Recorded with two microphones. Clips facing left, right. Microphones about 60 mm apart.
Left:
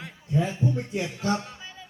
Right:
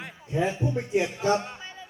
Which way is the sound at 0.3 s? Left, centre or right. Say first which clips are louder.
Even; right.